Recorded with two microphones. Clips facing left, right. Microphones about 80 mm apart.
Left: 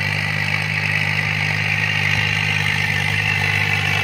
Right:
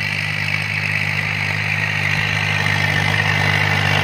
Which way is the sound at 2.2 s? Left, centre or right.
Right.